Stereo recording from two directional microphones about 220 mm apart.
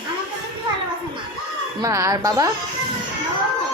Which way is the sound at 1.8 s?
15° right (ahead or behind).